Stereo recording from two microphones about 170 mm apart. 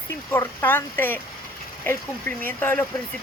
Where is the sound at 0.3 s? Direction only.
15° left (ahead or behind).